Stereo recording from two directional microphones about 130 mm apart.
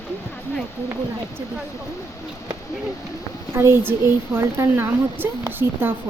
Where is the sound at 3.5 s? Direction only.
20° right (ahead or behind).